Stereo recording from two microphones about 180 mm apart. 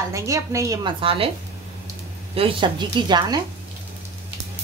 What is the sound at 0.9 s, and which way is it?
Speech, 30° right (ahead or behind).